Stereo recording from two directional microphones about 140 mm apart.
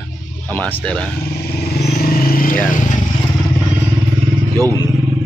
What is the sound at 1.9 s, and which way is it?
Vehicle, 90° left.